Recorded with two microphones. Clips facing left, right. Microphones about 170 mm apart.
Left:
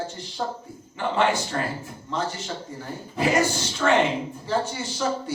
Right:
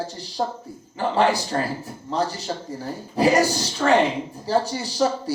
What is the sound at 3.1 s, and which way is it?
A man's voice, 35° right (ahead or behind).